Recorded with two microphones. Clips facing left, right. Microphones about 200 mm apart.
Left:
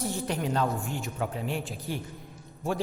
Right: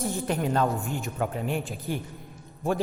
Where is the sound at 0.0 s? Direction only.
50° right (ahead or behind).